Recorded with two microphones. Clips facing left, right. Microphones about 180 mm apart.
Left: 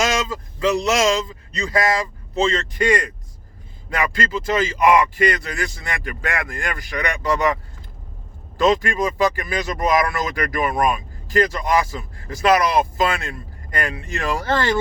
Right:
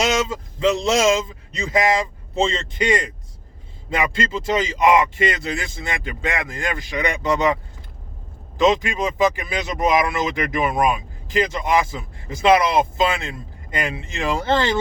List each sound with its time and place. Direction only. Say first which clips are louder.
0.0 s speech: right 1 dB; 25° right (ahead or behind)